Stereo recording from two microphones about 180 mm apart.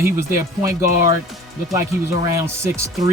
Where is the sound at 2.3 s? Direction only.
15° right (ahead or behind).